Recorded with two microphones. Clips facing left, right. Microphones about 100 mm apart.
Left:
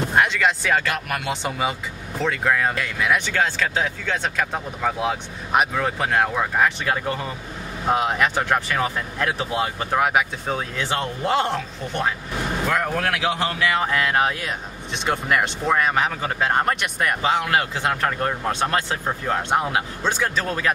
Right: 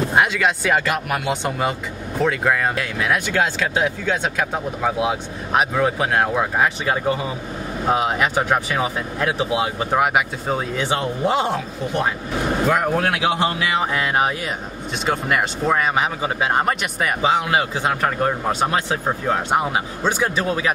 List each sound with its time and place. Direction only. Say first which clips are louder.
0.1 s speech: left 1 dB; 5° right (ahead or behind)
12.6 s speech: right 3 dB; 15° right (ahead or behind)
17.2 s speech: right 3 dB; 15° right (ahead or behind)